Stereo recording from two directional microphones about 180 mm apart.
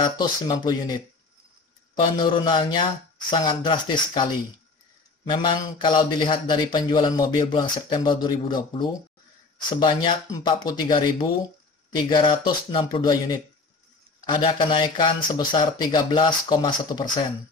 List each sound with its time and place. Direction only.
0.2 s a man's voice: 20° left (ahead or behind)
2.0 s a man's voice: 25° left (ahead or behind)
14.2 s a man's voice: 25° left (ahead or behind)